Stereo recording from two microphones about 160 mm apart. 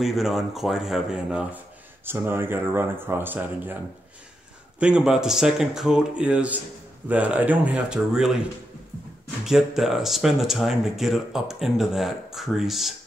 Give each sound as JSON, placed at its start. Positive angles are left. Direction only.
{"t": 0.0, "sound": "speech", "side_deg": 0}
{"t": 4.7, "sound": "speech", "side_deg": -5}
{"t": 9.4, "sound": "speech", "side_deg": -5}